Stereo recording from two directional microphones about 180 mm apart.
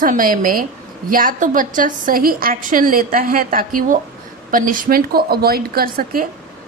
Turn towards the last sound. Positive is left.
turn(degrees=-55)  # may be behind; listen again after turning